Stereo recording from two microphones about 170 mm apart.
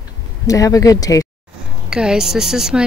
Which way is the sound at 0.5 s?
20° left (ahead or behind).